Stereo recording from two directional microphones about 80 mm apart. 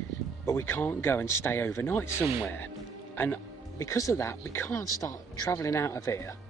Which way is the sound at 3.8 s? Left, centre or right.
Left.